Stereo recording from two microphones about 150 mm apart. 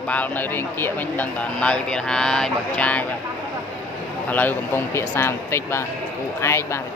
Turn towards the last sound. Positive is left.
turn(degrees=20)  # may be behind; listen again after turning